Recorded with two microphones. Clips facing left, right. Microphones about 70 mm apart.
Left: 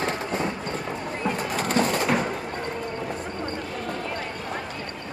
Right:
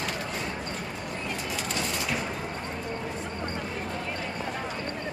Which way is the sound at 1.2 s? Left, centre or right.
Left.